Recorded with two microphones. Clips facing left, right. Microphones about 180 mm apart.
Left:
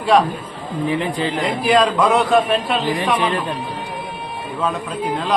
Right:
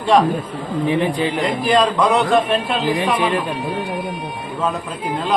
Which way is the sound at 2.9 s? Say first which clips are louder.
Right 2 dB; 20° right (ahead or behind).